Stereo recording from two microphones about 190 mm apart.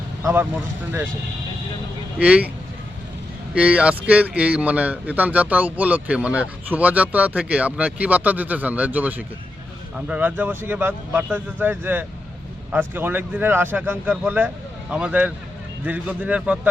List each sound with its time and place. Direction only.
0.2 s vehicle: 15° right (ahead or behind)
2.1 s speech: 5° right (ahead or behind)
3.5 s speech: 5° right (ahead or behind)